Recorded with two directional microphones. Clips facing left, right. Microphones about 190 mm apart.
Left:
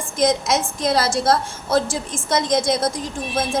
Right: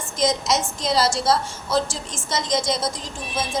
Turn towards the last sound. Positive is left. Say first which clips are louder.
# left 5 dB
turn(degrees=55)  # may be behind; listen again after turning